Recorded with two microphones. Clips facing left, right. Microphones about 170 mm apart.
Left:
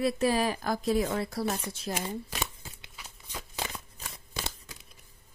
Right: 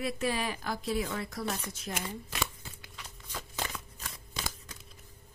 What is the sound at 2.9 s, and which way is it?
Shuffling cards, 10° left (ahead or behind).